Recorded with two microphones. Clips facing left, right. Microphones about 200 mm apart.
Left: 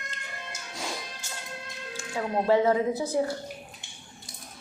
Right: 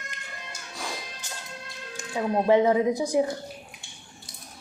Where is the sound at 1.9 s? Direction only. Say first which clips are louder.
Right 3 dB; 15° right (ahead or behind).